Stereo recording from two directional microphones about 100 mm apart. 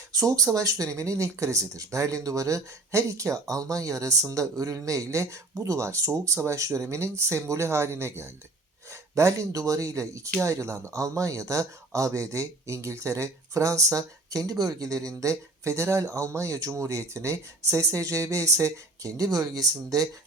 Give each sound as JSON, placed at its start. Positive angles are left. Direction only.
{"t": 0.2, "sound": "speech", "side_deg": -35}